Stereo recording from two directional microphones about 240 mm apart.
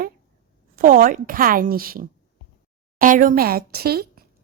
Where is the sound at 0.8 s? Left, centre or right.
Right.